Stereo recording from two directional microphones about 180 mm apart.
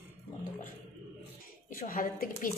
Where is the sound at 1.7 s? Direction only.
50° left (ahead or behind).